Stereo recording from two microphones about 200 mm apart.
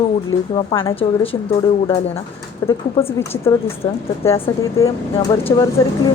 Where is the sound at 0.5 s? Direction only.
20° left (ahead or behind).